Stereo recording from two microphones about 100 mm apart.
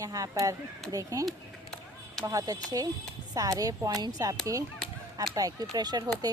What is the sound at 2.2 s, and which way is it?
Speech, 35° right (ahead or behind).